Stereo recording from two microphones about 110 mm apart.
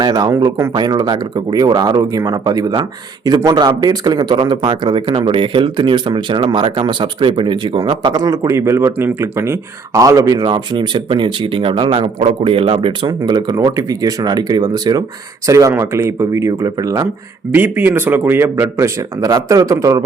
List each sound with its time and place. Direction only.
0.0 s speech: 40° right (ahead or behind)
13.1 s speech: 40° right (ahead or behind)
17.5 s speech: 15° right (ahead or behind)